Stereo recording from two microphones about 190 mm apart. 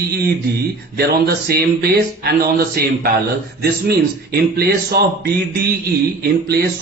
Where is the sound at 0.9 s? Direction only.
55° right (ahead or behind).